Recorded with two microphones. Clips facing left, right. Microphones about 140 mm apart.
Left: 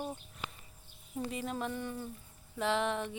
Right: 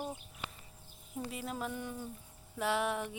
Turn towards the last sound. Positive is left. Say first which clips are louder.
# left 1 dB
turn(degrees=-10)  # may be behind; listen again after turning